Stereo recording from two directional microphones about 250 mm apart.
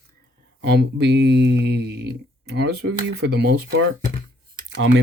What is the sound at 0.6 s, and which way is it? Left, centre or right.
Speech, right.